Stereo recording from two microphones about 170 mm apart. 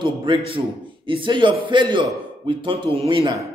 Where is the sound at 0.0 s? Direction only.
30° right (ahead or behind).